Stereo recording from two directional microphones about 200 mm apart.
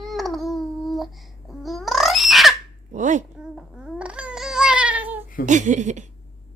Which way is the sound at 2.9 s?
40° right (ahead or behind).